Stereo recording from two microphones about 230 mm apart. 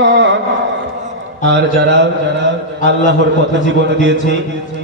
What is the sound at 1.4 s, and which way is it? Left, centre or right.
A man's voice, right.